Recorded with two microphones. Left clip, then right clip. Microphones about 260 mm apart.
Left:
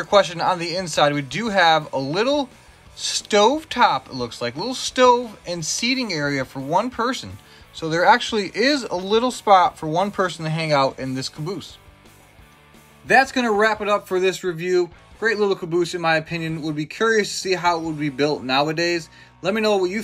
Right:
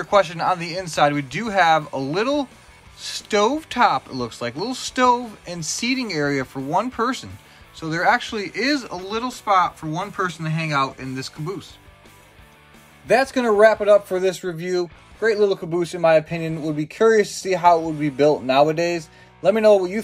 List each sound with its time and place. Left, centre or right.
0.0 s speech: centre
13.0 s speech: centre
17.7 s a man's voice: centre
18.0 s speech: centre